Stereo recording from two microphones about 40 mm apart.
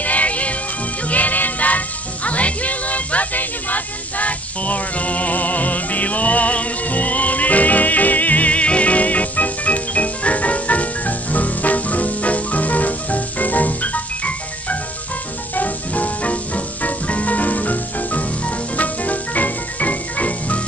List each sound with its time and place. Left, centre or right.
0.0 s music: left